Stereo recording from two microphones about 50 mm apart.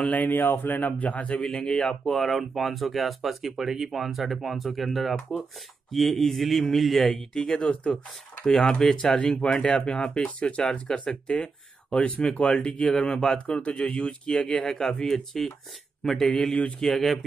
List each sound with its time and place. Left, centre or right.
0.0 s a man's voice: left
1.4 s speech: centre